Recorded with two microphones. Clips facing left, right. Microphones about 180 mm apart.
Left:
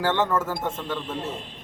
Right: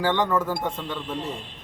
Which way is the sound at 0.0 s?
10° right (ahead or behind).